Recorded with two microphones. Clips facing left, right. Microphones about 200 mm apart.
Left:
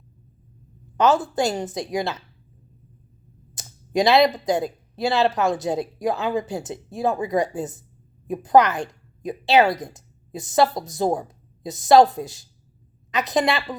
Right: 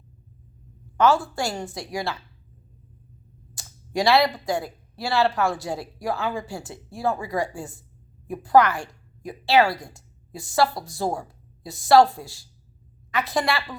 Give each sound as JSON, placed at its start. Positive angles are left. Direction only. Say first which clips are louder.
{"t": 0.9, "sound": "speech", "louder": "left 1 dB", "side_deg": 20}
{"t": 3.5, "sound": "a woman's voice", "louder": "left 5 dB", "side_deg": 20}